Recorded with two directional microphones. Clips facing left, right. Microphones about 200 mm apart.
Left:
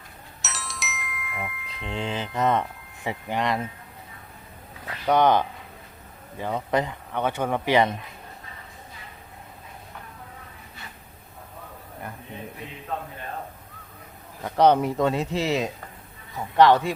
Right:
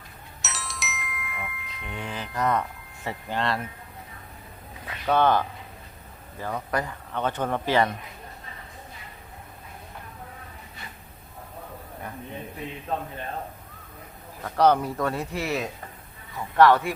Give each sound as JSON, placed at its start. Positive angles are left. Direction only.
{"t": 0.4, "sound": "glockenspiel", "side_deg": 0}
{"t": 1.9, "sound": "speech", "side_deg": 25}
{"t": 5.0, "sound": "speech", "side_deg": 15}
{"t": 14.4, "sound": "speech", "side_deg": 20}